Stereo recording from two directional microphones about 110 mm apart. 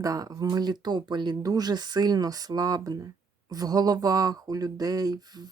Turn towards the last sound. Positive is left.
turn(degrees=-35)  # may be behind; listen again after turning